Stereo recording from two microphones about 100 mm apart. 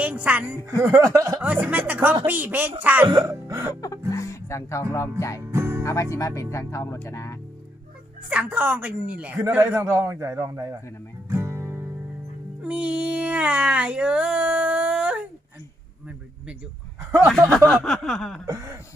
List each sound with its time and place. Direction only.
0.0 s a woman's voice: 15° right (ahead or behind)
0.8 s speech: 30° right (ahead or behind)
1.4 s a woman's voice: 15° right (ahead or behind)
3.2 s music: 30° right (ahead or behind)
3.8 s music: 35° left (ahead or behind)
5.4 s music: 25° right (ahead or behind)
5.8 s speech: 30° left (ahead or behind)
8.3 s a woman's voice: 15° right (ahead or behind); by 10.8 s 30° right (ahead or behind)
11.3 s music: 25° right (ahead or behind)
12.6 s speech: 10° right (ahead or behind)
17.7 s a sound: 5° left (ahead or behind)
18.4 s speech: 35° right (ahead or behind)